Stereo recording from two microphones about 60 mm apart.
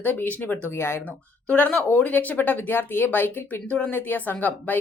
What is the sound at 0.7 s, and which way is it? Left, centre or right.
Speech, left.